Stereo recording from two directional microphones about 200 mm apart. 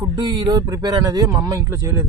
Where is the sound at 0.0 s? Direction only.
20° right (ahead or behind).